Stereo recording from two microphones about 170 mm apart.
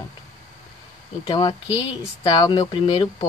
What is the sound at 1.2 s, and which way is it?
Speech, 25° left (ahead or behind).